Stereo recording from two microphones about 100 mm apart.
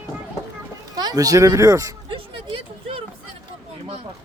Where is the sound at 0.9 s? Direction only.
40° right (ahead or behind).